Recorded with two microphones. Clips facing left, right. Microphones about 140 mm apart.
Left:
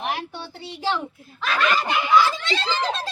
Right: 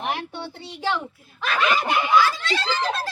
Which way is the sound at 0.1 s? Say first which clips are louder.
Right 1 dB; 20° right (ahead or behind).